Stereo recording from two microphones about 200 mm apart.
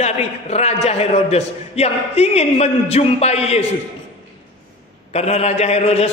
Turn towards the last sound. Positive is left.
turn(degrees=30)  # may be behind; listen again after turning